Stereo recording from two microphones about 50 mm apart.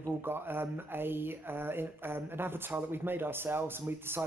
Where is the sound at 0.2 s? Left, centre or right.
Right.